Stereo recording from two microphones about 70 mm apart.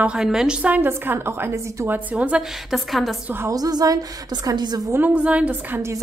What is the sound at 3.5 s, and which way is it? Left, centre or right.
A woman's voice, right.